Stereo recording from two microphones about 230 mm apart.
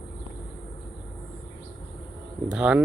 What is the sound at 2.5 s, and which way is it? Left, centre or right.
Speech, centre.